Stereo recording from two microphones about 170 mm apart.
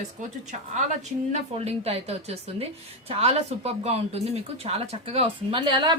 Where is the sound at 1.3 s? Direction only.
40° right (ahead or behind).